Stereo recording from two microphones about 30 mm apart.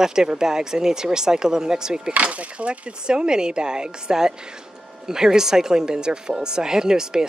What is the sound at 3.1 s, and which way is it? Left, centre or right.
Speech, right.